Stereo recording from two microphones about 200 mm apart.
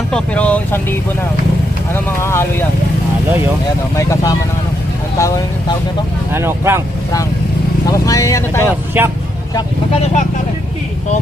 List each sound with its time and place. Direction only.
0.1 s speech: 5° left (ahead or behind)
3.9 s speech: 15° left (ahead or behind)
6.3 s speech: 10° right (ahead or behind)
7.9 s speech: 15° left (ahead or behind)
8.9 s speech: 10° right (ahead or behind)
9.6 s speech: 30° left (ahead or behind)